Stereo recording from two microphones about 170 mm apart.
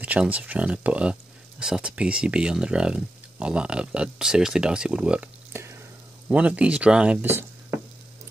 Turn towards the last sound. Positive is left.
turn(degrees=-10)  # may be behind; listen again after turning